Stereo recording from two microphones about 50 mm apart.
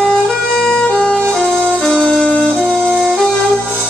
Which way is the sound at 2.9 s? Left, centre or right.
Centre.